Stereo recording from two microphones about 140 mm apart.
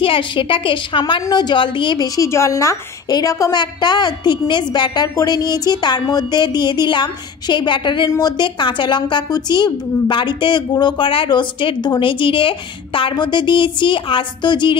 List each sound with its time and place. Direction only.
0.0 s a woman's voice: 35° left (ahead or behind)